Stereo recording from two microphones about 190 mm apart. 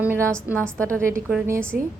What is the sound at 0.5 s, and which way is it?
Speech, 5° left (ahead or behind).